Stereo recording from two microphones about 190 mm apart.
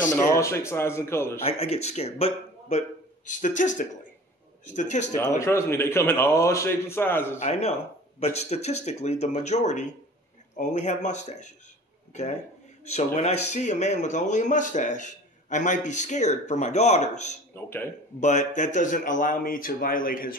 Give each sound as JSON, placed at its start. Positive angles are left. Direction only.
{"t": 0.1, "sound": "a man's voice", "side_deg": 15}
{"t": 1.4, "sound": "speech", "side_deg": 30}
{"t": 5.4, "sound": "a man's voice", "side_deg": 15}
{"t": 7.3, "sound": "a man's voice", "side_deg": 35}